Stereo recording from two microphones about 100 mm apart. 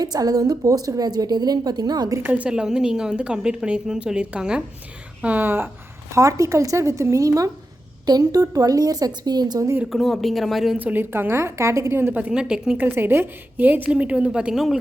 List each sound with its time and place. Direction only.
0.0 s a woman's voice: 40° right (ahead or behind)
2.2 s a woman's voice: 15° right (ahead or behind); by 9.6 s 45° right (ahead or behind)
9.9 s speech: centre (ahead or behind)
10.8 s a woman's voice: 20° right (ahead or behind)
12.8 s a woman's voice: 20° right (ahead or behind); by 14.8 s 5° right (ahead or behind)